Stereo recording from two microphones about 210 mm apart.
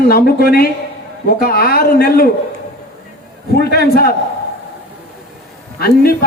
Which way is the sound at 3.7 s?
45° left (ahead or behind).